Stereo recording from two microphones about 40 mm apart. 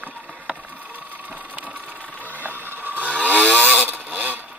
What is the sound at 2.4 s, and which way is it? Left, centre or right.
Mechanisms, right.